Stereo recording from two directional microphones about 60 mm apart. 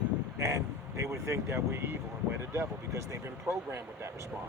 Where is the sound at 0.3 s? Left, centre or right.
Right.